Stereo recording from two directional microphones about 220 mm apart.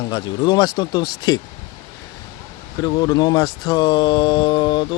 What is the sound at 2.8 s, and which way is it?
A man's voice, 15° left (ahead or behind).